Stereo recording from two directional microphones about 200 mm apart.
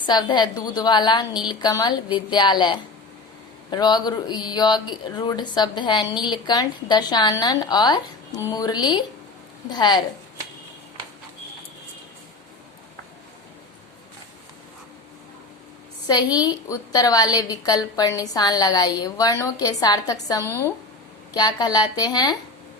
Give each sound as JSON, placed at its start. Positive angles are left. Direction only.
{"t": 0.0, "sound": "a woman's voice", "side_deg": 20}
{"t": 16.0, "sound": "a woman's voice", "side_deg": 20}